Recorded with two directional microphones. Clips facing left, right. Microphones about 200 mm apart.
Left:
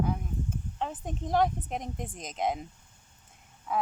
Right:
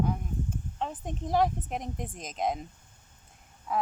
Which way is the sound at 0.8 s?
Centre (ahead or behind).